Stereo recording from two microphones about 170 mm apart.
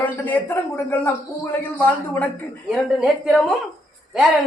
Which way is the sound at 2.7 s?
Centre (ahead or behind).